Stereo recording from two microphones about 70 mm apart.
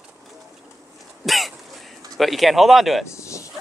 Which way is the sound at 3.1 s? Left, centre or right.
Left.